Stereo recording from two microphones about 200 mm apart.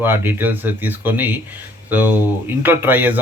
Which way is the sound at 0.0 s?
10° right (ahead or behind).